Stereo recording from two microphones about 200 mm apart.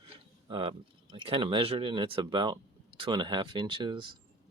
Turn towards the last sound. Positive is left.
turn(degrees=-25)  # may be behind; listen again after turning